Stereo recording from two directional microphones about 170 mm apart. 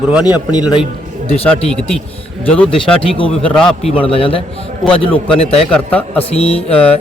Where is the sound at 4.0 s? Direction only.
30° left (ahead or behind).